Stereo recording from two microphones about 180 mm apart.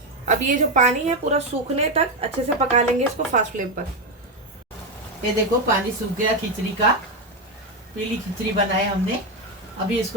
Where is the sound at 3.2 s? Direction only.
45° right (ahead or behind).